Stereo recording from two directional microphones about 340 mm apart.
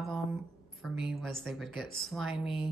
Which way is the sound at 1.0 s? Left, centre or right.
Centre.